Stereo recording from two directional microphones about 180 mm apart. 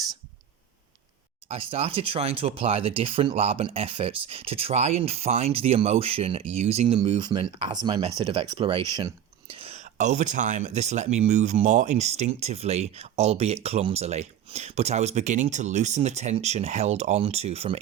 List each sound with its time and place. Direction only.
1.5 s speech: 30° right (ahead or behind)